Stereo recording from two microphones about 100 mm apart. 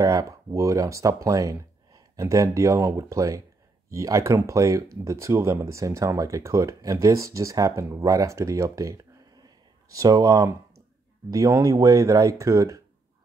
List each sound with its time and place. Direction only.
0.0 s speech: 35° right (ahead or behind)